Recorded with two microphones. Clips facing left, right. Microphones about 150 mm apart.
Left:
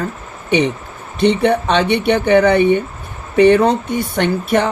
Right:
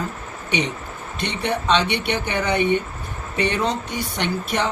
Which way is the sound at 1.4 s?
55° left (ahead or behind).